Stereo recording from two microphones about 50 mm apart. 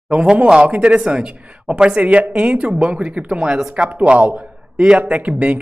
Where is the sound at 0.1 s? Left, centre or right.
Right.